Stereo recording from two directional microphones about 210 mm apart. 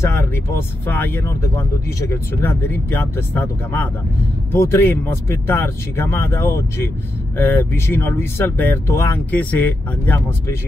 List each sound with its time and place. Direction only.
0.0 s speech: 10° left (ahead or behind)